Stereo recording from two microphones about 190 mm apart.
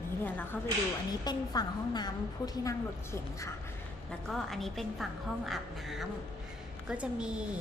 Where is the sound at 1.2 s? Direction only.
20° left (ahead or behind).